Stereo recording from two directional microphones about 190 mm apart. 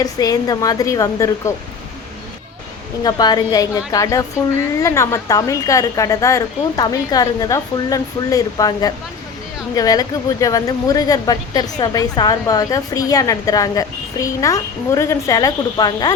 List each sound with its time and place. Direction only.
0.0 s speech: 20° left (ahead or behind)
3.0 s speech: 20° left (ahead or behind)